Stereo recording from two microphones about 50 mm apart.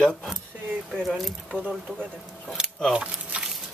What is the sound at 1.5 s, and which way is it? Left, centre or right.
Speech, right.